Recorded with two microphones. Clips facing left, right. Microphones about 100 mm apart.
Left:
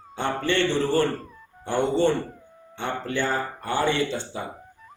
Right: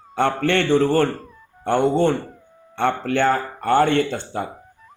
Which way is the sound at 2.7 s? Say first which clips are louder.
Right 7 dB; 65° right (ahead or behind).